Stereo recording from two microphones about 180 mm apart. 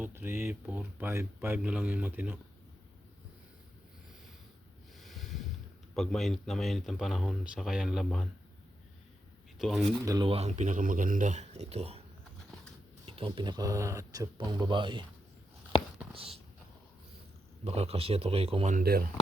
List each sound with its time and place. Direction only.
0.0 s speech: 10° right (ahead or behind)
4.9 s a sound: centre (ahead or behind)
5.9 s speech: centre (ahead or behind)
9.6 s speech: centre (ahead or behind)
10.0 s speech: 20° right (ahead or behind)
10.3 s speech: 40° right (ahead or behind)
13.1 s speech: 30° right (ahead or behind)
17.7 s speech: 35° right (ahead or behind)
18.8 s speech: 55° right (ahead or behind)